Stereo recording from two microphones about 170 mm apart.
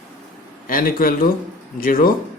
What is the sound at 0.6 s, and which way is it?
A man's voice, 55° left (ahead or behind).